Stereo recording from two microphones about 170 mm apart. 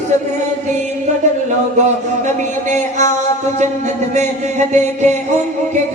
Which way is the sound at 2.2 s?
45° right (ahead or behind).